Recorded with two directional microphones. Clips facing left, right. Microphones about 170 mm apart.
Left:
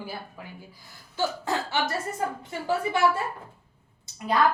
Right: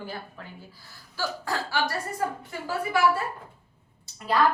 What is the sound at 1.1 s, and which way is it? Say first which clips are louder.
Speech: left 3 dB; 20° left (ahead or behind).